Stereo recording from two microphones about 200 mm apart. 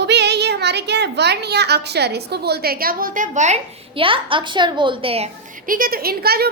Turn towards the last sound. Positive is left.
turn(degrees=-50)  # may be behind; listen again after turning